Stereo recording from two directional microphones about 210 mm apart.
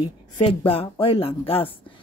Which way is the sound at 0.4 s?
25° left (ahead or behind).